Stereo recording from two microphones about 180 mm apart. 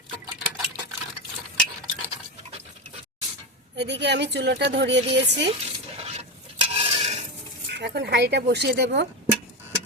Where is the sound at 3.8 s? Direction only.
75° right (ahead or behind).